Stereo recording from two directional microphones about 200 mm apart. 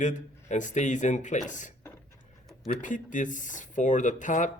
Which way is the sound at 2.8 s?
40° left (ahead or behind).